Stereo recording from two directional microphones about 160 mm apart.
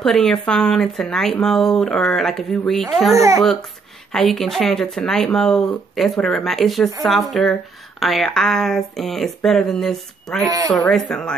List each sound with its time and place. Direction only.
0.0 s speech: 5° left (ahead or behind)
3.1 s speech: 20° right (ahead or behind)
4.1 s speech: centre (ahead or behind)